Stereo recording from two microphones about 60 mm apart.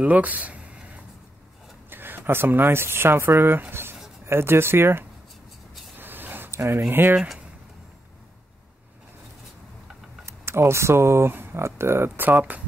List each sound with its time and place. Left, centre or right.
0.0 s speech: right
1.9 s speech: right
5.9 s a sound: right
6.5 s speech: right
10.2 s speech: right